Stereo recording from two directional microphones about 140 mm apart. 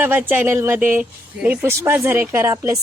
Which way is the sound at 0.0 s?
15° right (ahead or behind).